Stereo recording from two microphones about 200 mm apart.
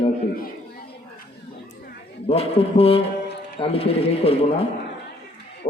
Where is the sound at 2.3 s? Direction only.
30° left (ahead or behind).